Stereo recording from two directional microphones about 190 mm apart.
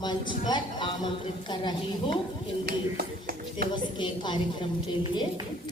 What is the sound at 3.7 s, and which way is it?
A man's voice, 25° left (ahead or behind).